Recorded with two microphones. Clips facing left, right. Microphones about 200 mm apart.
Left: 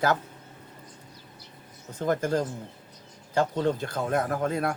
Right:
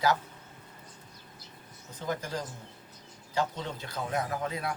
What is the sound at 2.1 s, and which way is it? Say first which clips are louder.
Speech: left 9 dB; 50° left (ahead or behind).